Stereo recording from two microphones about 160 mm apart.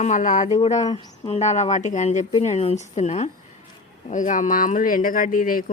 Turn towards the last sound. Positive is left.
turn(degrees=60)  # may be behind; listen again after turning